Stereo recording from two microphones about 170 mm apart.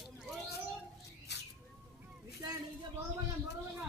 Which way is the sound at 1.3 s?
80° left.